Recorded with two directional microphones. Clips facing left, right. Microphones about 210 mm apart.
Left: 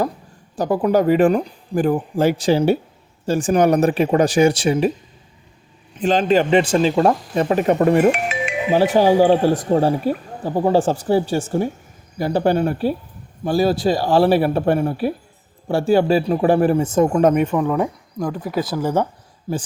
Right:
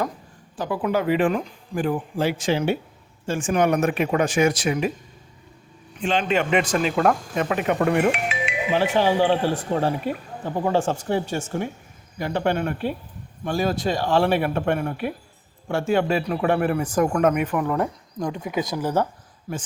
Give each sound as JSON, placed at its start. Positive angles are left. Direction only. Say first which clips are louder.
{"t": 0.5, "sound": "speech", "louder": "left 7 dB", "side_deg": 40}
{"t": 6.0, "sound": "a man's voice", "louder": "left 6 dB", "side_deg": 35}
{"t": 19.5, "sound": "a man's voice", "louder": "left 7 dB", "side_deg": 25}